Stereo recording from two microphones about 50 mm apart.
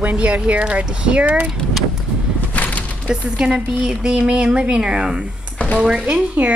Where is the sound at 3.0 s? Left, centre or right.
Centre.